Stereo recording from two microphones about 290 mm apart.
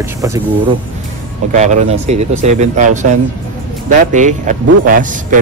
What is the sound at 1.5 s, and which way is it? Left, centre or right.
Speech, right.